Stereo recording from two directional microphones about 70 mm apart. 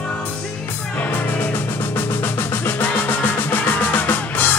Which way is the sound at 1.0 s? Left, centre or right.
Left.